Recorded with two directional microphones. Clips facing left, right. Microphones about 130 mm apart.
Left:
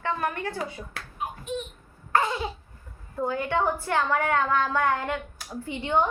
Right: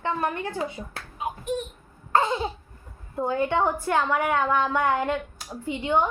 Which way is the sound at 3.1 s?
20° right (ahead or behind).